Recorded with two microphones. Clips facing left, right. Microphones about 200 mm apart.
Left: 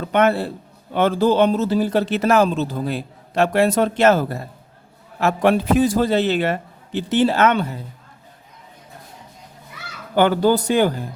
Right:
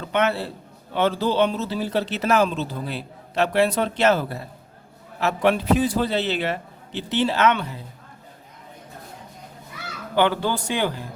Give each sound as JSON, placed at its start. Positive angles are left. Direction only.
{"t": 0.1, "sound": "speech", "side_deg": 50}
{"t": 10.2, "sound": "speech", "side_deg": 40}